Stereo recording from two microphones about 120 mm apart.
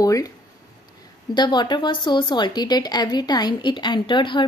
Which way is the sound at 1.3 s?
40° left (ahead or behind).